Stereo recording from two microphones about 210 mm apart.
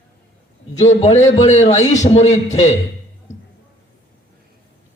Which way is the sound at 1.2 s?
15° left (ahead or behind).